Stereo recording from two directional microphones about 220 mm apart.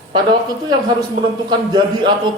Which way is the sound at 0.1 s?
20° right (ahead or behind).